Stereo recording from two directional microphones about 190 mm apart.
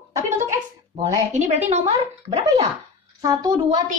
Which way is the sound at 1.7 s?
35° right (ahead or behind).